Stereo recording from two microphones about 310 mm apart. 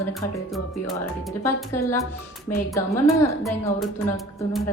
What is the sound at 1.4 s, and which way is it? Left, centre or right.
A woman's voice, centre.